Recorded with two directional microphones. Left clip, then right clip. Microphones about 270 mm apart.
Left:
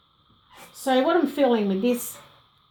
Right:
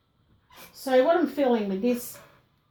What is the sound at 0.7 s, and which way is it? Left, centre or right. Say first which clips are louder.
A woman's voice: even; left.